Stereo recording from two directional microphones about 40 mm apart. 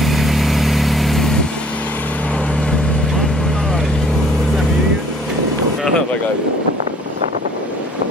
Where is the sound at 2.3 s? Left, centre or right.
Left.